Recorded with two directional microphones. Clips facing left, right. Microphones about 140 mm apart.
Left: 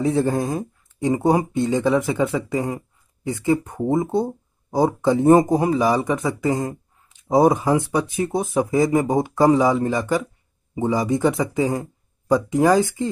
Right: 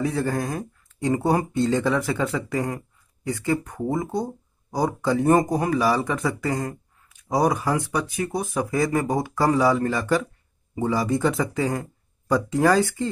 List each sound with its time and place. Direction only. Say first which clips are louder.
0.0 s speech: left 5 dB; 25° left (ahead or behind)